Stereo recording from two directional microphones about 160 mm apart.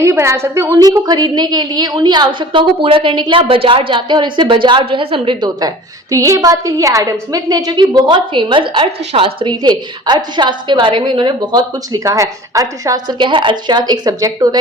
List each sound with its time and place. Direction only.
0.0 s a woman's voice: 15° right (ahead or behind)